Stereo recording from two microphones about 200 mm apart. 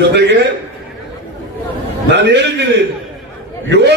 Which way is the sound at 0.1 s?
55° right (ahead or behind).